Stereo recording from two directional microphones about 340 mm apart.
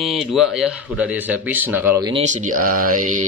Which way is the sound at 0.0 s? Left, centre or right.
Centre.